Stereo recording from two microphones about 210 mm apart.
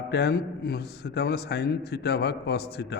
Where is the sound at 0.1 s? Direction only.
50° left (ahead or behind).